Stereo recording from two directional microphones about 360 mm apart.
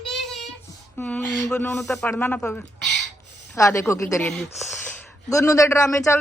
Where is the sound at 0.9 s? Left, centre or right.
Centre.